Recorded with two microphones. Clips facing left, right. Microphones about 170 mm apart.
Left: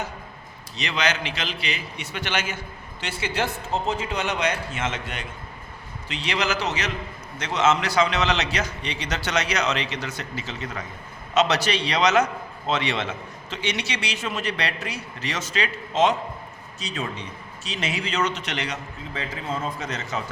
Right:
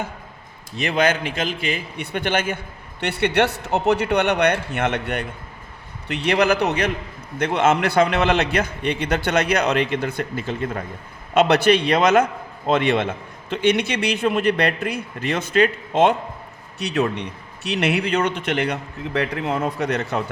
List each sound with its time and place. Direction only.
0.8 s a man's voice: 50° right (ahead or behind)